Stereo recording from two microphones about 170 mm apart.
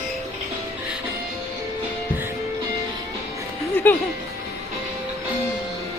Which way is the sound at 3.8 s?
10° left (ahead or behind).